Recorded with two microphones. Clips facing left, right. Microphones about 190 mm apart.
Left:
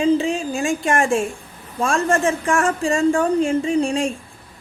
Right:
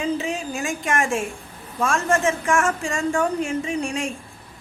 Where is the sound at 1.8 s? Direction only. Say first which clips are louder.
Left 2 dB; 30° left (ahead or behind).